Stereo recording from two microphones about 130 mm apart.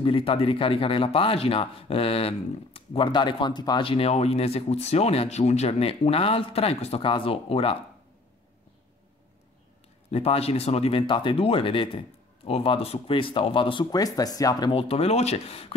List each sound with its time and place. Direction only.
0.0 s speech: 45° left (ahead or behind)
10.1 s speech: 50° left (ahead or behind)
13.8 s speech: 30° left (ahead or behind)
14.8 s speech: 50° left (ahead or behind)